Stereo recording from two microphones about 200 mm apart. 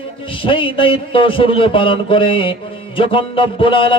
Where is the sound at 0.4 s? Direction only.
25° left (ahead or behind).